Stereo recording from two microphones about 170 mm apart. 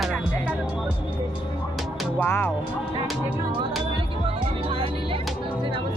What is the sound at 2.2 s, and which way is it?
Speech, 10° left (ahead or behind).